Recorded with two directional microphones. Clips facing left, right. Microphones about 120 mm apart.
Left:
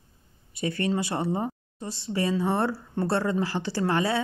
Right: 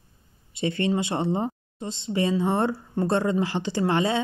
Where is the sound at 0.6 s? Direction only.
25° right (ahead or behind).